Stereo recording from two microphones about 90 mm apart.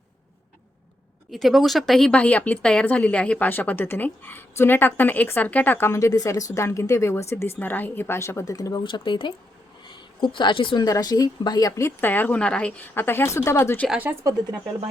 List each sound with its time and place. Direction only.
1.3 s speech: centre (ahead or behind); by 8.8 s 45° left (ahead or behind)
8.8 s a woman's voice: 65° left (ahead or behind)
10.8 s speech: 45° left (ahead or behind)
11.9 s speech: 20° left (ahead or behind)